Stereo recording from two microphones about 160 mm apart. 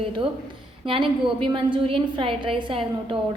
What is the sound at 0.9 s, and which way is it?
A woman's voice, 30° right (ahead or behind).